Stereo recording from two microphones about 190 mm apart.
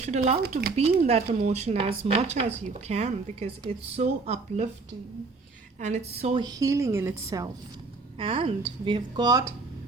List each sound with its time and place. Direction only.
0.1 s speech: 35° right (ahead or behind)
5.8 s speech: 35° right (ahead or behind)
6.4 s a woman's voice: 20° right (ahead or behind)
8.2 s speech: 30° right (ahead or behind)